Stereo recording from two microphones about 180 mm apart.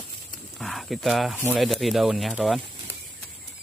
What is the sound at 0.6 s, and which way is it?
Speech, centre (ahead or behind).